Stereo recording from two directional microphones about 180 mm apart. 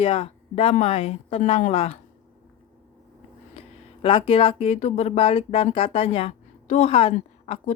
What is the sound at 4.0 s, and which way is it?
A woman's voice, 30° left (ahead or behind).